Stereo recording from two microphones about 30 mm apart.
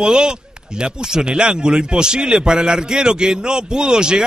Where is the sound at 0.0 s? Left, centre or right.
Right.